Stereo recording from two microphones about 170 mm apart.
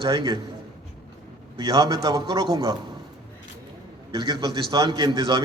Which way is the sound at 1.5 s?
25° right (ahead or behind).